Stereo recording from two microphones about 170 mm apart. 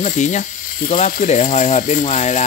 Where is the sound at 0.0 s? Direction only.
45° left (ahead or behind).